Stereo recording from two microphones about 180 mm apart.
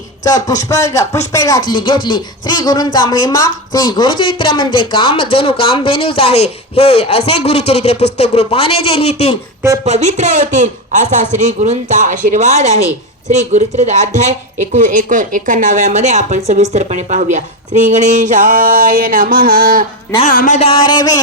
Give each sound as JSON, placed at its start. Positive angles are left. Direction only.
{"t": 0.3, "sound": "speech", "side_deg": 20}
{"t": 9.8, "sound": "a woman's voice", "side_deg": -40}
{"t": 20.2, "sound": "a man's voice", "side_deg": 45}
{"t": 20.6, "sound": "speech", "side_deg": 30}